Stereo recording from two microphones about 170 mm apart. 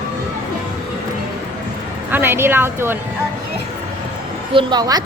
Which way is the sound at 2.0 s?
10° right (ahead or behind).